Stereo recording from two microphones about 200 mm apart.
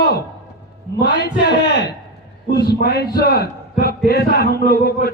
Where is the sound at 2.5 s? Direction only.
50° left (ahead or behind).